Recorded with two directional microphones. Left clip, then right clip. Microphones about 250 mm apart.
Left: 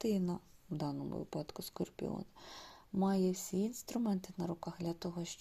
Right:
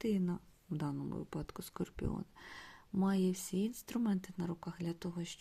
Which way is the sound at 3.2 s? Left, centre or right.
Right.